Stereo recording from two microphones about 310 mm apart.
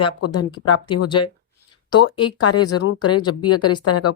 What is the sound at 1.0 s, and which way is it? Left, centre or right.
Speech, centre.